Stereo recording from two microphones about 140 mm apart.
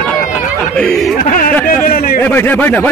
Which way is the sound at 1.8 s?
90° left.